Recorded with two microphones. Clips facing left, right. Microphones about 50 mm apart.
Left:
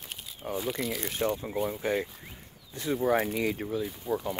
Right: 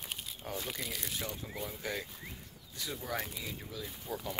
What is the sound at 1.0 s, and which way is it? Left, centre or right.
Speech, left.